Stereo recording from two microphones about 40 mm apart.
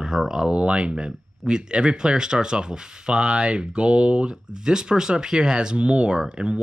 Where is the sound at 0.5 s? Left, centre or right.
Right.